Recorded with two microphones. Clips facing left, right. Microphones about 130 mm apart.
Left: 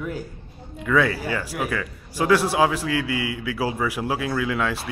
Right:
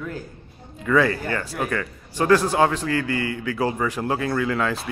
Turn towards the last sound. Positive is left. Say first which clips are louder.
# right 1 dB
turn(degrees=5)  # may be behind; listen again after turning